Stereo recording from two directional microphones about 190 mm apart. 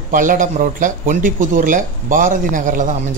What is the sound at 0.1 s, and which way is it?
Speech, 45° right (ahead or behind).